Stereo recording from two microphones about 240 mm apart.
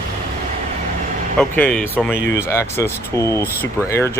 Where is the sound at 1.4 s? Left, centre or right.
Centre.